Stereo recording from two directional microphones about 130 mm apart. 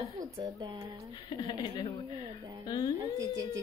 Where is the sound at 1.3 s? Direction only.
35° left (ahead or behind).